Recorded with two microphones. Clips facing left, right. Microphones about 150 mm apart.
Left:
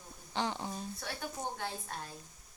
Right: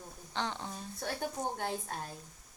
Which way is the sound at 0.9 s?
45° right (ahead or behind).